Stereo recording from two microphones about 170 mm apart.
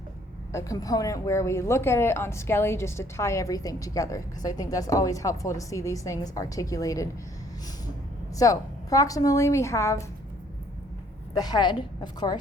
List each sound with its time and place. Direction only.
0.5 s a woman's voice: 20° left (ahead or behind)
8.4 s a woman's voice: 20° left (ahead or behind)
11.3 s a woman's voice: 25° left (ahead or behind)